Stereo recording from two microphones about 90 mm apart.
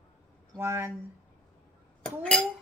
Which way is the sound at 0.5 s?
25° right (ahead or behind).